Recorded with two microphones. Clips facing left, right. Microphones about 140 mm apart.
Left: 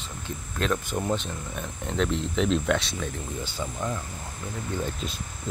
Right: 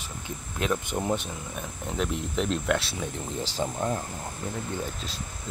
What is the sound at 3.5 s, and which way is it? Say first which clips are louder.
Speech: right 4 dB; 30° right (ahead or behind).